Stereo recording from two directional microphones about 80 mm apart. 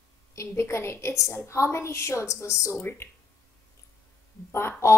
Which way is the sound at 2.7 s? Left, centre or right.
Left.